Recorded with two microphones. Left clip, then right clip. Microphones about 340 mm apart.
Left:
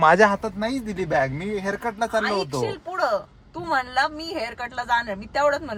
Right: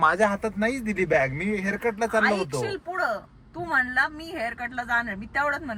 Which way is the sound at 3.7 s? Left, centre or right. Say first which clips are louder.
Left 1 dB; centre.